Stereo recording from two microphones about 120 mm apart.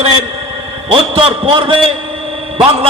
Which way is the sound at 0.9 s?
50° right (ahead or behind).